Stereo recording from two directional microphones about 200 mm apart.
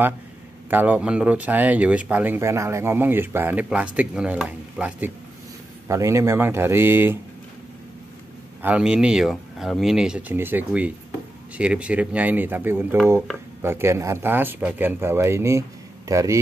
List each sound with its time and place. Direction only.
0.7 s speech: 10° right (ahead or behind)
8.6 s speech: 5° right (ahead or behind)